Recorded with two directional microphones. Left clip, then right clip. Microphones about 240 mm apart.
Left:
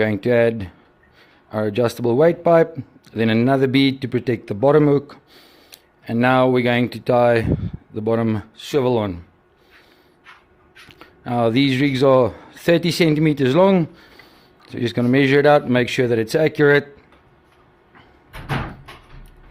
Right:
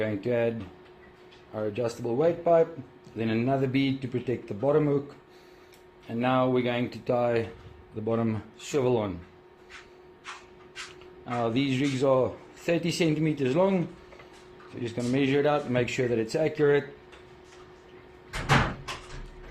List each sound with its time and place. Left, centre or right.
0.0 s a man's voice: left
6.1 s a man's voice: left
11.3 s a man's voice: left